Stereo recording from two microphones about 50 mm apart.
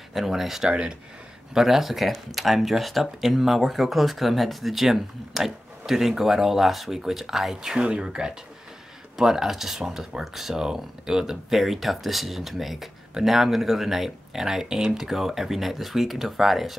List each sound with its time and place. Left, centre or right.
0.1 s speech: centre
0.7 s speech: right
1.5 s speech: centre